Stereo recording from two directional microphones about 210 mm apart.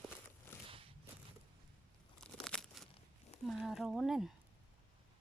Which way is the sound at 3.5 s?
Centre (ahead or behind).